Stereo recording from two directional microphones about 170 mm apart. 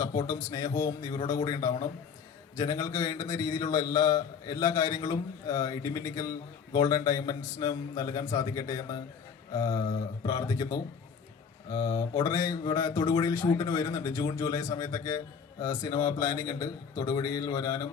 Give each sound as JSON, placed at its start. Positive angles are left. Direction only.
{"t": 0.3, "sound": "a man's voice", "side_deg": 20}
{"t": 14.1, "sound": "speech", "side_deg": 30}
{"t": 14.3, "sound": "a man's voice", "side_deg": 15}